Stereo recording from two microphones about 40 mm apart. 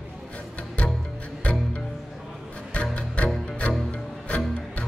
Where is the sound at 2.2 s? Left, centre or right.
Centre.